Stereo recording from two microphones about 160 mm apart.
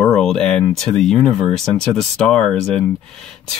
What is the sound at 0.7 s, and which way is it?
Speech, 5° left (ahead or behind).